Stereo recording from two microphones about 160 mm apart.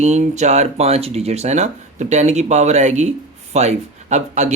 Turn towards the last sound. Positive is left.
turn(degrees=-45)  # may be behind; listen again after turning